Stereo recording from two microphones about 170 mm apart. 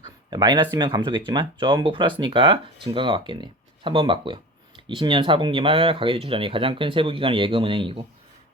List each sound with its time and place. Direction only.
0.0 s speech: 25° right (ahead or behind)